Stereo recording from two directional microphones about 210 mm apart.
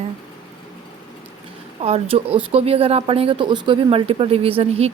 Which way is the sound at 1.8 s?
30° right (ahead or behind).